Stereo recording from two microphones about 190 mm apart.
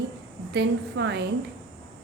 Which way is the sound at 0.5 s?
65° right (ahead or behind).